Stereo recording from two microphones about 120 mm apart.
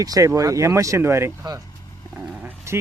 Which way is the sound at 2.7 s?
25° right (ahead or behind).